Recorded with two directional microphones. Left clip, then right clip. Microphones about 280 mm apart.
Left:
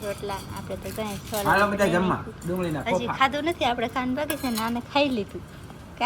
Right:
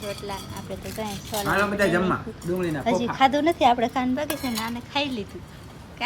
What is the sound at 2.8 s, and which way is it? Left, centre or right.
Speech, centre.